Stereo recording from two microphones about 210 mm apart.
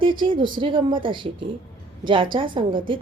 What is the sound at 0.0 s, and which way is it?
A woman's voice, 25° right (ahead or behind).